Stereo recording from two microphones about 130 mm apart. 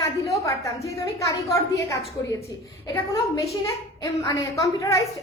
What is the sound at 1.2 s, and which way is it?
Speech, 25° left (ahead or behind).